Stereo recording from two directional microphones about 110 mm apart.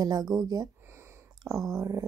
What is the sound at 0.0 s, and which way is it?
Speech, 35° right (ahead or behind).